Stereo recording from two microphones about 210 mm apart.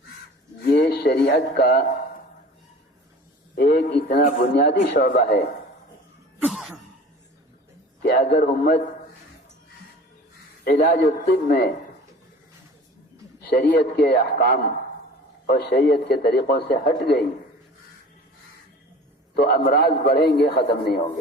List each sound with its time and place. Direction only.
0.8 s speech: 50° left (ahead or behind)
3.5 s a man's voice: 45° left (ahead or behind)
4.9 s speech: 40° left (ahead or behind)
6.4 s cough: centre (ahead or behind)
8.0 s a man's voice: 50° left (ahead or behind)
10.6 s a man's voice: 50° left (ahead or behind)
13.5 s a man's voice: 45° left (ahead or behind)
19.3 s a man's voice: 50° left (ahead or behind)